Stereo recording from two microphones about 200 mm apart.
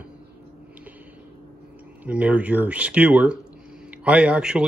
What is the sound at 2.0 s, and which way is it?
A man's voice, 5° right (ahead or behind).